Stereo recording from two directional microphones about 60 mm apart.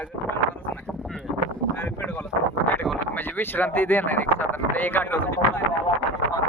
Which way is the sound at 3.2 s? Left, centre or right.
Left.